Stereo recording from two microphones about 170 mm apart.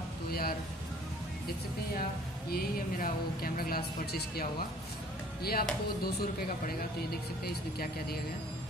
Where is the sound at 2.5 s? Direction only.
60° left (ahead or behind).